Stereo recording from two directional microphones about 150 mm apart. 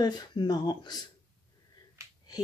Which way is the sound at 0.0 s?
30° left (ahead or behind).